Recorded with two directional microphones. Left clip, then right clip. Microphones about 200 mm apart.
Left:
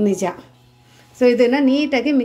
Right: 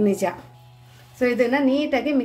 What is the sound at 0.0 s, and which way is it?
A woman's voice, 15° left (ahead or behind).